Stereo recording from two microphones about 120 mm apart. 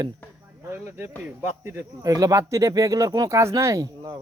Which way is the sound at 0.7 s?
20° right (ahead or behind).